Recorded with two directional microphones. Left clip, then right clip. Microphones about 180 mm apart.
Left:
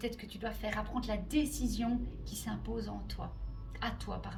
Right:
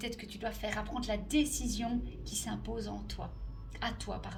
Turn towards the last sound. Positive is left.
turn(degrees=-40)  # may be behind; listen again after turning